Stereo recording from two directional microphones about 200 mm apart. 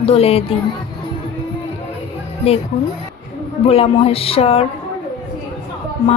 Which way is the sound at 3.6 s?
30° left (ahead or behind).